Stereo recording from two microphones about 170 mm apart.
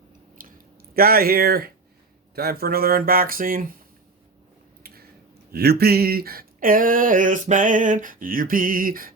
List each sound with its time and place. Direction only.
0.4 s a sound: 55° right (ahead or behind)
0.9 s speech: 60° right (ahead or behind)
5.5 s speech: 65° right (ahead or behind)